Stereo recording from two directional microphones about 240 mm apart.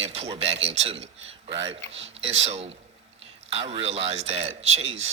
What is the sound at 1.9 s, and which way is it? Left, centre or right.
Speech, right.